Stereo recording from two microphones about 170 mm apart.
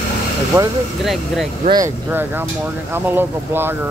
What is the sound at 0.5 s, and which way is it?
Speech, 15° right (ahead or behind).